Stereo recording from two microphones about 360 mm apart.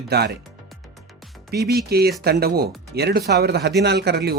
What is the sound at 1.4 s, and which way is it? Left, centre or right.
Speech, right.